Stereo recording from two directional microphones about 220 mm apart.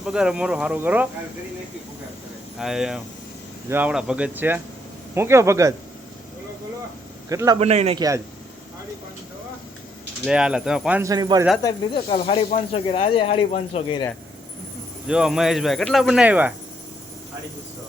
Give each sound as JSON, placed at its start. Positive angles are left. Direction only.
{"t": 0.0, "sound": "speech", "side_deg": -5}
{"t": 2.6, "sound": "speech", "side_deg": 0}
{"t": 7.3, "sound": "speech", "side_deg": -15}
{"t": 7.6, "sound": "a man's voice", "side_deg": -30}
{"t": 10.2, "sound": "speech", "side_deg": -5}
{"t": 11.6, "sound": "speech", "side_deg": 25}
{"t": 15.0, "sound": "speech", "side_deg": -5}